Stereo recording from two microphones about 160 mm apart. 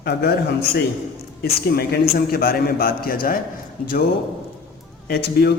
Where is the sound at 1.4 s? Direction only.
75° left (ahead or behind).